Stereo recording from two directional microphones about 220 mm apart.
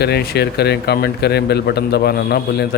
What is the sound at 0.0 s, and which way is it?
A man's voice, 45° left (ahead or behind).